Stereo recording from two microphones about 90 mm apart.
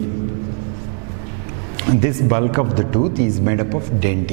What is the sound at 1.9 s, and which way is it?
Speech, 15° right (ahead or behind).